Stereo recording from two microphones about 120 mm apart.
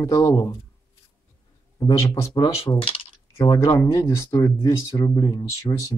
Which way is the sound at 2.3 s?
40° left (ahead or behind).